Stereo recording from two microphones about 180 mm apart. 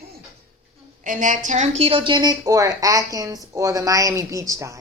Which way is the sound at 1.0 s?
45° right (ahead or behind).